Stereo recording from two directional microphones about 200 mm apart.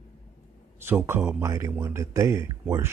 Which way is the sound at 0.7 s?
10° right (ahead or behind).